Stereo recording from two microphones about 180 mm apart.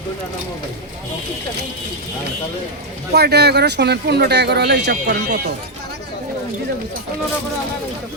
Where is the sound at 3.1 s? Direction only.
65° right (ahead or behind).